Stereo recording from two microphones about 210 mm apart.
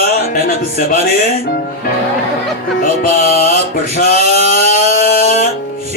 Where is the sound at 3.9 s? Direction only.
45° left (ahead or behind).